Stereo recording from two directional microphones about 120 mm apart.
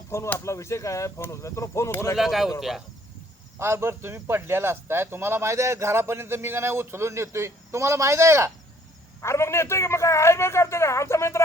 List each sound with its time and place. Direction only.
0.1 s a man's voice: 25° left (ahead or behind)
2.1 s speech: centre (ahead or behind)
3.6 s speech: 20° right (ahead or behind)
9.2 s a man's voice: 20° left (ahead or behind)